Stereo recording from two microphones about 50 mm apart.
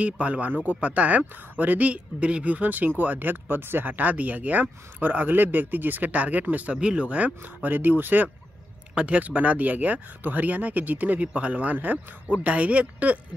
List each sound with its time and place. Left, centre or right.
0.0 s speech: right
6.8 s speech: centre; by 8.3 s right
8.9 s speech: right